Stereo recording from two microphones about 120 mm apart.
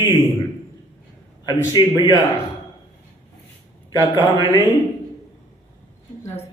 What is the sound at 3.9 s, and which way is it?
Speech, 25° left (ahead or behind).